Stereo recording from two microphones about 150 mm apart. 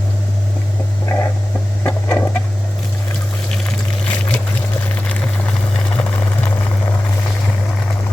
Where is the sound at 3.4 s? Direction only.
5° left (ahead or behind).